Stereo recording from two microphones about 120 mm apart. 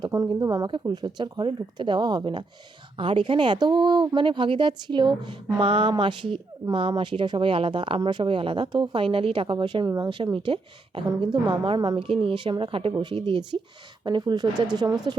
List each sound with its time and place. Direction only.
0.3 s speech: 30° right (ahead or behind); by 11.0 s 45° right (ahead or behind)
11.2 s speech: 35° right (ahead or behind)
11.9 s speech: 50° right (ahead or behind); by 15.1 s 35° right (ahead or behind)